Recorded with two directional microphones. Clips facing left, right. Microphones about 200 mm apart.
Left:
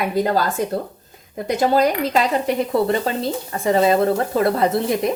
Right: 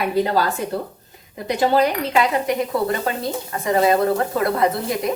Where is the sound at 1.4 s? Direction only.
35° left (ahead or behind).